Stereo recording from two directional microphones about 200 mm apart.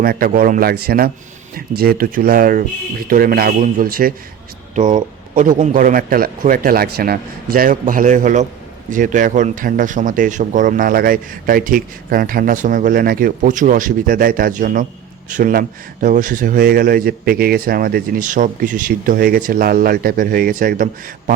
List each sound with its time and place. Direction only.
0.0 s speech: 45° right (ahead or behind)